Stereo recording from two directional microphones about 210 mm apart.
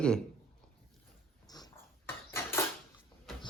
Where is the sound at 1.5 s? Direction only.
15° left (ahead or behind).